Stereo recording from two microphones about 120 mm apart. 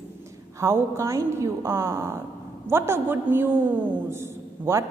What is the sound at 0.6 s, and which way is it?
A woman's voice, 25° right (ahead or behind).